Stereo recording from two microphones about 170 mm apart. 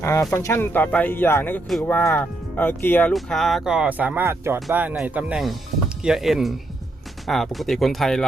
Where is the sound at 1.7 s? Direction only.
Centre (ahead or behind).